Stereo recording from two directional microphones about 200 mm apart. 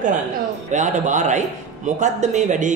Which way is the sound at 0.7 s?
35° right (ahead or behind).